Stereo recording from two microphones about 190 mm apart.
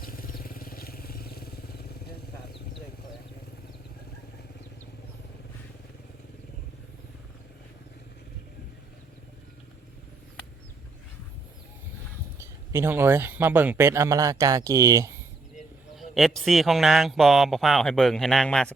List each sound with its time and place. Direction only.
0.0 s vehicle: 50° left (ahead or behind)
12.7 s speech: 15° right (ahead or behind)
16.0 s speech: centre (ahead or behind)